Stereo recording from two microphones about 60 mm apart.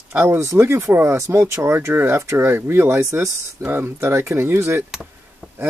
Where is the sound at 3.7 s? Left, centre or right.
Right.